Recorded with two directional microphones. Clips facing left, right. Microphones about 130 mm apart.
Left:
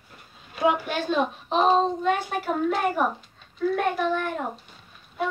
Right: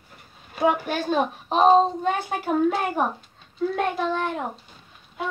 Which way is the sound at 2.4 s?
25° right (ahead or behind).